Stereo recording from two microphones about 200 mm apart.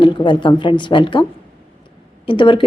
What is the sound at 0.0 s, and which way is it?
Speech, 25° left (ahead or behind).